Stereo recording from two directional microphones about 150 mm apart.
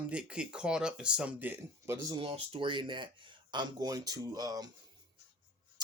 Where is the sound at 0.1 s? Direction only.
5° right (ahead or behind); by 4.7 s 25° right (ahead or behind).